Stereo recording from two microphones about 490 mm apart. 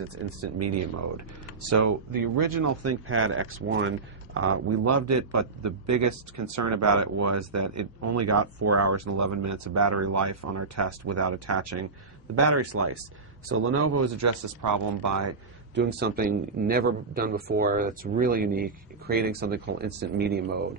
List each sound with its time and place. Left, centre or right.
1.7 s speech: right
15.7 s speech: centre